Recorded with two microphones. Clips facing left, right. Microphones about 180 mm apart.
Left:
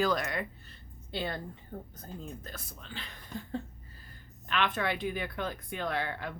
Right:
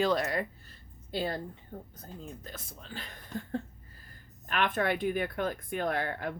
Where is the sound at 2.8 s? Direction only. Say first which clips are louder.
Right 1 dB; 45° right (ahead or behind).